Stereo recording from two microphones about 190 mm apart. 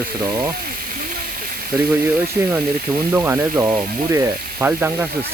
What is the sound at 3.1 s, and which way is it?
Speech, 10° right (ahead or behind).